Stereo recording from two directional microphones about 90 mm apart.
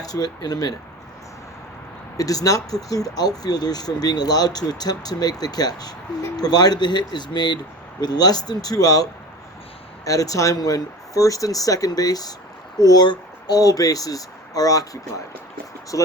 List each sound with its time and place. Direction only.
0.0 s speech: 45° left (ahead or behind)
2.1 s speech: 40° left (ahead or behind)